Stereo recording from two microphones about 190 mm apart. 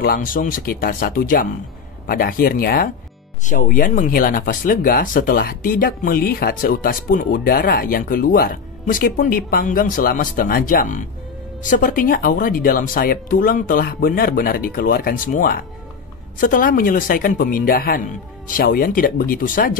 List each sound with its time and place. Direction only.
0.0 s speech: 50° left (ahead or behind)